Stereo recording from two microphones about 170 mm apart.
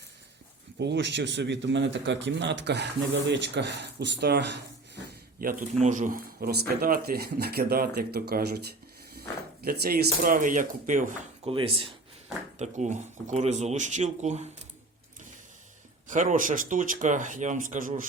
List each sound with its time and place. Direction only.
0.8 s a man's voice: 90° right
5.4 s speech: 55° right (ahead or behind)
11.4 s speech: 35° right (ahead or behind)
16.0 s speech: 50° right (ahead or behind)